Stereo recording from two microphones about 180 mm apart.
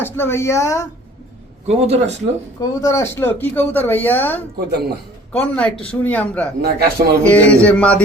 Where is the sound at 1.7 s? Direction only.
35° right (ahead or behind).